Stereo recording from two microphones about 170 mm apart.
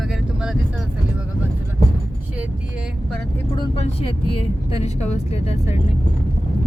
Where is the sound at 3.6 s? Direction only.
35° left (ahead or behind).